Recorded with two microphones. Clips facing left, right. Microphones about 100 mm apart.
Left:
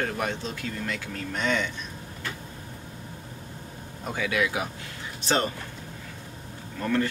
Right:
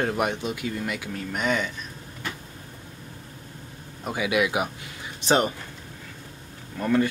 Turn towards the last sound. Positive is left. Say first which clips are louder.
# right 3 dB
turn(degrees=-10)  # may be behind; listen again after turning